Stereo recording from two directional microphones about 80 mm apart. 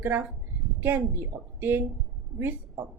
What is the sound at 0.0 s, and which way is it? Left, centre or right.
Speech, right.